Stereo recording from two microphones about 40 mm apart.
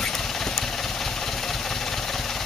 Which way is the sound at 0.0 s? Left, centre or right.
Centre.